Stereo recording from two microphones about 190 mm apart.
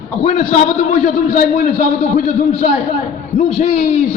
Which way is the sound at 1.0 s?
50° left (ahead or behind).